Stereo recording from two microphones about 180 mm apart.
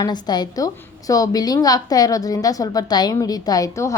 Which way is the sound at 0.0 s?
25° left (ahead or behind).